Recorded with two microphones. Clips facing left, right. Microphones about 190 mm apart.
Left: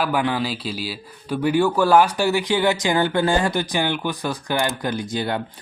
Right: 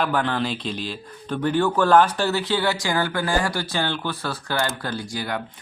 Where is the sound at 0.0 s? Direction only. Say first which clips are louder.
Left 1 dB; 10° left (ahead or behind); by 5.4 s 25° left (ahead or behind).